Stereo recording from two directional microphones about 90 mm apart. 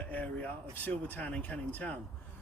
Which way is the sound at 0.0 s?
15° left (ahead or behind).